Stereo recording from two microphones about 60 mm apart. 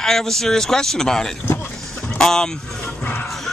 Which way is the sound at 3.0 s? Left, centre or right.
Left.